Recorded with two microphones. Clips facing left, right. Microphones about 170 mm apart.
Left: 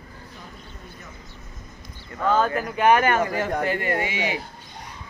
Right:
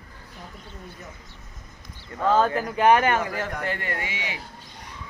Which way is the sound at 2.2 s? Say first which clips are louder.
Right 1 dB; 30° right (ahead or behind).